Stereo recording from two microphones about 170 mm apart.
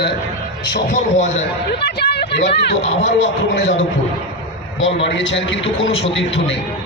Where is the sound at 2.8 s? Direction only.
40° left (ahead or behind).